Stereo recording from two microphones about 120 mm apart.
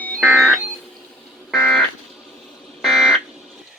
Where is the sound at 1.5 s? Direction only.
Centre (ahead or behind).